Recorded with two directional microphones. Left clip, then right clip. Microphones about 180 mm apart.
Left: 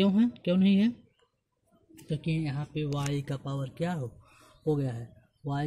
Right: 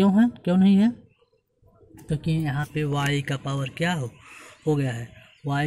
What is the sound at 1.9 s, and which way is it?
Speech, 5° right (ahead or behind).